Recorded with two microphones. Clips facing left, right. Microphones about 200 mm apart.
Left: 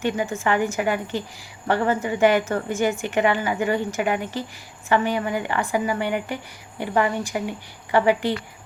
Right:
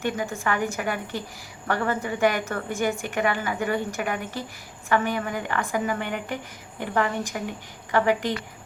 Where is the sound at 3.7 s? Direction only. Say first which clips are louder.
Left 4 dB; 15° left (ahead or behind).